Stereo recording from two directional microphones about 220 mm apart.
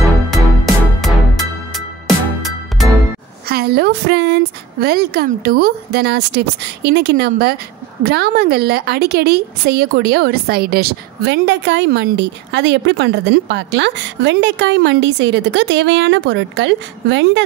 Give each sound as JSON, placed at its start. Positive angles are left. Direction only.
{"t": 2.0, "sound": "music", "side_deg": 0}
{"t": 3.4, "sound": "a woman's voice", "side_deg": -45}